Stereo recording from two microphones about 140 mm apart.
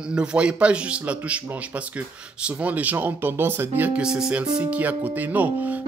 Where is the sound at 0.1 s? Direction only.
5° right (ahead or behind).